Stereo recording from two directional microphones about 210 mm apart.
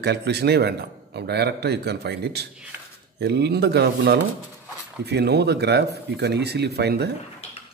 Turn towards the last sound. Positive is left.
turn(degrees=-50)  # may be behind; listen again after turning